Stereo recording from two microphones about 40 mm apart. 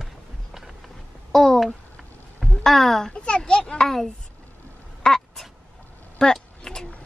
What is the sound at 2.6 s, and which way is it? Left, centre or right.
Speech, centre.